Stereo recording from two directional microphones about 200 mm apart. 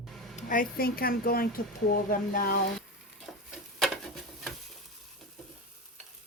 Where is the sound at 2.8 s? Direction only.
Centre (ahead or behind).